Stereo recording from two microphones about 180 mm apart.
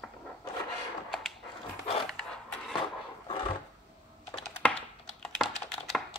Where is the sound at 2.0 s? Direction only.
5° left (ahead or behind).